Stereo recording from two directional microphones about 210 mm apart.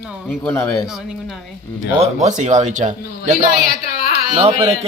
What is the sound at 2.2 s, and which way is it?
A man's voice, 35° right (ahead or behind).